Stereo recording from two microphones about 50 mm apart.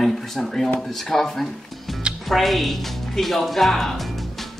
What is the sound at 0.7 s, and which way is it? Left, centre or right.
Speech, centre.